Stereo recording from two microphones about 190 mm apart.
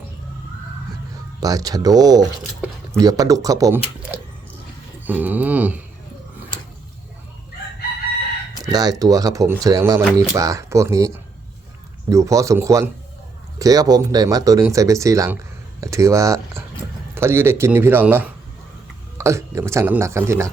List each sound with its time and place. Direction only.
1.4 s speech: 20° right (ahead or behind)
5.0 s speech: 10° right (ahead or behind)
8.6 s speech: 20° right (ahead or behind)